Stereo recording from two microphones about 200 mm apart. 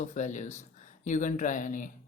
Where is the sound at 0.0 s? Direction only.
35° left (ahead or behind).